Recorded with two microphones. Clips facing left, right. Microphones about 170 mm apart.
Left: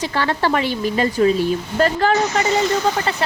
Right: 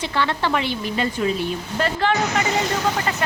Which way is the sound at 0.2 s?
40° left (ahead or behind).